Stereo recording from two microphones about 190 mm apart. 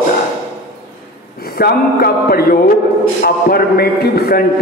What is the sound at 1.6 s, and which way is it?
A man's voice, 55° left (ahead or behind).